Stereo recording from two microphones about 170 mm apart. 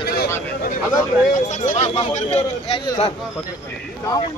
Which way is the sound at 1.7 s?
40° left (ahead or behind).